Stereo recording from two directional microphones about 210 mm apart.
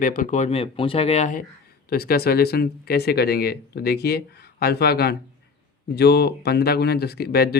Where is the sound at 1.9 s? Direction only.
45° left (ahead or behind).